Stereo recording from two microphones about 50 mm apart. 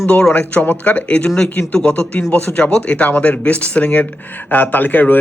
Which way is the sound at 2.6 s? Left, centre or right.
Left.